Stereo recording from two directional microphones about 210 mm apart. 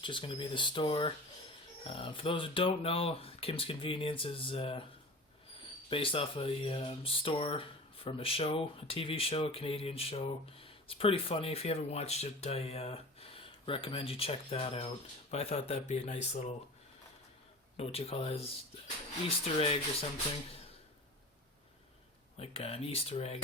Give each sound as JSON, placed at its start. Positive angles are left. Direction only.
{"t": 0.0, "sound": "speech", "side_deg": 25}
{"t": 5.9, "sound": "speech", "side_deg": 25}
{"t": 17.7, "sound": "speech", "side_deg": 30}
{"t": 19.5, "sound": "speech", "side_deg": 25}
{"t": 22.4, "sound": "speech", "side_deg": 30}